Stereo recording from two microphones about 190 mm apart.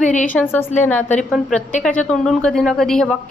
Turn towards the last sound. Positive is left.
turn(degrees=5)  # may be behind; listen again after turning